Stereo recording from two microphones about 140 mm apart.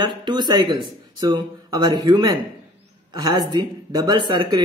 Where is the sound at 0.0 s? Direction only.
30° right (ahead or behind).